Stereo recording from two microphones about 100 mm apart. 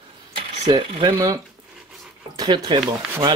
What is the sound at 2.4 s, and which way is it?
Speech, 45° right (ahead or behind).